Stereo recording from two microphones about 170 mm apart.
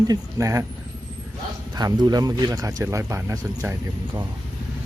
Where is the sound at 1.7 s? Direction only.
25° right (ahead or behind).